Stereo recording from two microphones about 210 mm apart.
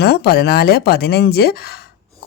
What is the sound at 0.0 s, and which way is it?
Speech, 50° left (ahead or behind).